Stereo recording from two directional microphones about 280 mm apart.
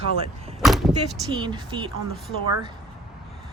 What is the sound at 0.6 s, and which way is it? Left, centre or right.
Door, centre.